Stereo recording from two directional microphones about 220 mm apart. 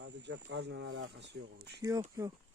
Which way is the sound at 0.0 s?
50° right (ahead or behind).